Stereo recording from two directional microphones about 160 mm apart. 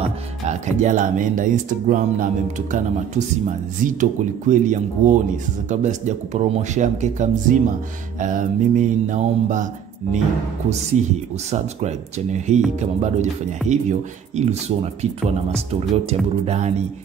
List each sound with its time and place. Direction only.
0.5 s speech: 50° right (ahead or behind)
10.9 s speech: 45° right (ahead or behind)
16.4 s speech: 45° right (ahead or behind)